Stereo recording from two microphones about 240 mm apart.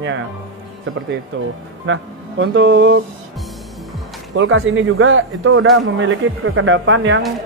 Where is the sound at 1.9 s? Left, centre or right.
Right.